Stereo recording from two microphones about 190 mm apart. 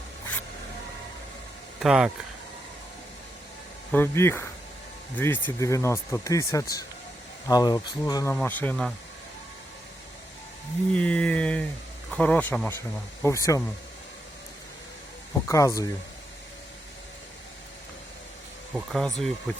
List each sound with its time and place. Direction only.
1.8 s speech: 5° right (ahead or behind)
3.9 s speech: 15° left (ahead or behind)
10.9 s speech: 5° left (ahead or behind)
15.3 s speech: 15° left (ahead or behind)
18.7 s speech: centre (ahead or behind)